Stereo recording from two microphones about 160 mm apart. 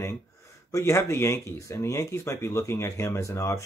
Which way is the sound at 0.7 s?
20° left (ahead or behind).